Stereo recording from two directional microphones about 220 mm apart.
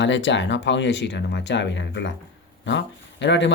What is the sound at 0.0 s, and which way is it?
Speech, 55° left (ahead or behind).